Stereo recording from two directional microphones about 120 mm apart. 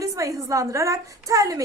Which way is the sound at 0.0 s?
25° right (ahead or behind).